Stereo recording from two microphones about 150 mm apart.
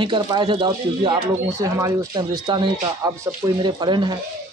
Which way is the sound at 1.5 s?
20° right (ahead or behind).